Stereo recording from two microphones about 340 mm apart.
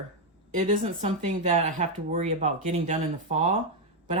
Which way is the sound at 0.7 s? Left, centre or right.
Right.